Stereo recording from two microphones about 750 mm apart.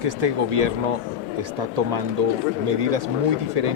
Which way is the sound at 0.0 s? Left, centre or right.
Right.